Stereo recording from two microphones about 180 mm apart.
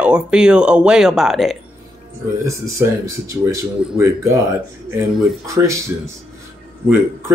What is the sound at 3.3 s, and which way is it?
Speech, 15° right (ahead or behind).